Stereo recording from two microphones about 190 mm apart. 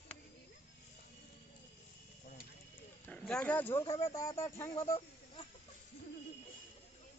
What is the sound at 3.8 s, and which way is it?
Speech, 30° left (ahead or behind).